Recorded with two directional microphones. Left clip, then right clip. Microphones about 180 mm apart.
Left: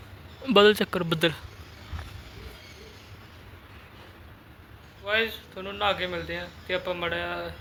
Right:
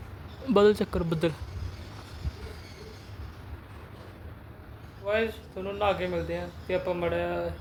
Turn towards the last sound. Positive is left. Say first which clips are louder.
# right 1 dB
turn(degrees=-10)  # may be behind; listen again after turning